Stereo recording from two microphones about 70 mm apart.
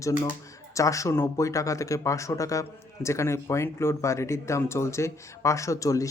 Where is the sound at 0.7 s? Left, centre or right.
Left.